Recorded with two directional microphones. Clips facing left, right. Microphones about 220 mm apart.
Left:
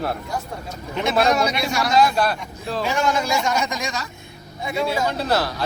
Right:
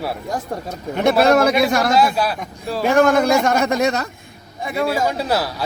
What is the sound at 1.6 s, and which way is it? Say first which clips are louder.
Speech: right 7 dB; 55° right (ahead or behind).